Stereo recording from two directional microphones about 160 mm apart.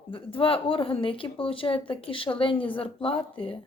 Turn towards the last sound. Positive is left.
turn(degrees=35)  # may be behind; listen again after turning